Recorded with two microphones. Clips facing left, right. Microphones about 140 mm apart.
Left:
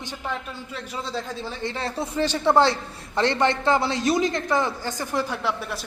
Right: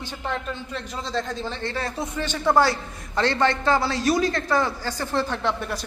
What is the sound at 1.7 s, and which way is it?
A man's voice, 30° left (ahead or behind).